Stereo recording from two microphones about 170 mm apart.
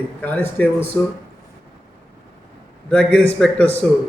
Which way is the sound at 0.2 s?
10° left (ahead or behind).